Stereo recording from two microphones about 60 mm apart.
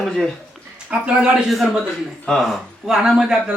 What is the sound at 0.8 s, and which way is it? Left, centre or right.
Speech, centre.